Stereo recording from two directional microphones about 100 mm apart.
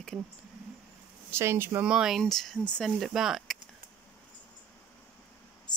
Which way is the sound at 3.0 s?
5° right (ahead or behind).